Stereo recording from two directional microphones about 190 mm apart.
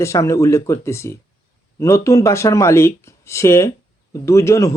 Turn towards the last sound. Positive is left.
turn(degrees=15)  # may be behind; listen again after turning